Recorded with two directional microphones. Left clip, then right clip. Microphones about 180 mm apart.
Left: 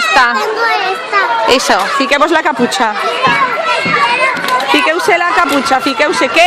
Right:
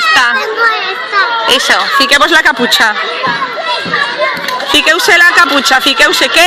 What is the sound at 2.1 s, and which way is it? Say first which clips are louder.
Speech: right 3 dB; 5° left (ahead or behind).